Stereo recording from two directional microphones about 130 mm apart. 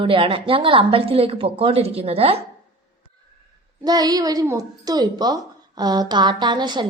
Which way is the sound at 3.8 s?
30° right (ahead or behind).